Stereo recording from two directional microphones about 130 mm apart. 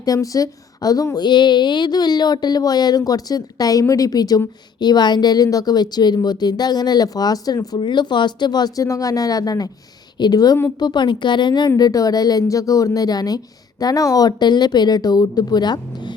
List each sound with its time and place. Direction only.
0.0 s a woman's voice: 25° left (ahead or behind)